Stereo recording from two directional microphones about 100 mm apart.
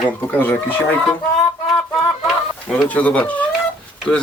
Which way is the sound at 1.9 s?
5° left (ahead or behind).